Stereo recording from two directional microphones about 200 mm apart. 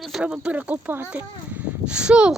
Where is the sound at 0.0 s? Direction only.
5° right (ahead or behind).